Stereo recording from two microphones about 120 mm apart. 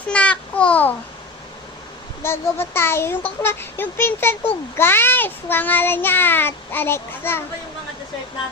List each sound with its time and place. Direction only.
0.1 s a child's voice: 10° left (ahead or behind)
2.2 s a child's voice: 20° left (ahead or behind)
4.8 s child singing: 20° left (ahead or behind)